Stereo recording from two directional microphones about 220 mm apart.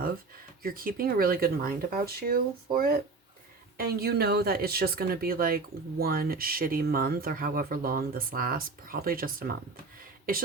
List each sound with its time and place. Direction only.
0.6 s speech: 40° right (ahead or behind)